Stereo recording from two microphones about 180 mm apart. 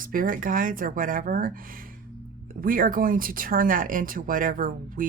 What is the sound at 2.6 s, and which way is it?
Speech, 50° right (ahead or behind).